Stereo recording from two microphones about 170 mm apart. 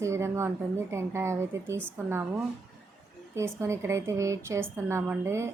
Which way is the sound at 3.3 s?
15° right (ahead or behind).